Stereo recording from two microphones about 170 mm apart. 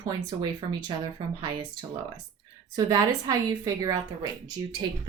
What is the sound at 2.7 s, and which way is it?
A woman's voice, 20° right (ahead or behind).